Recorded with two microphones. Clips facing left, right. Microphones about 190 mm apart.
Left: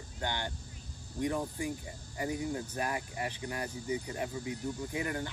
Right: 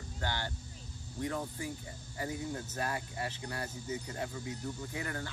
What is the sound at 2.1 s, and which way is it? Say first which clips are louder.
Speech: left 4 dB; 20° left (ahead or behind).